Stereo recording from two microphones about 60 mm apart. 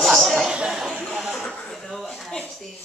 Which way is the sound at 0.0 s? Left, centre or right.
Centre.